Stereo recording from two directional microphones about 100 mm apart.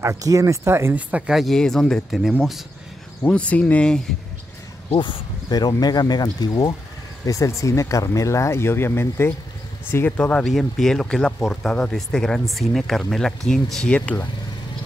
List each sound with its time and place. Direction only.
0.0 s speech: 35° right (ahead or behind)
0.9 s speech: 15° right (ahead or behind)
1.3 s speech: centre (ahead or behind)
3.3 s speech: 15° left (ahead or behind)
4.9 s speech: 55° left (ahead or behind); by 10.1 s 25° left (ahead or behind)
10.1 s speech: 15° left (ahead or behind)
10.4 s speech: centre (ahead or behind)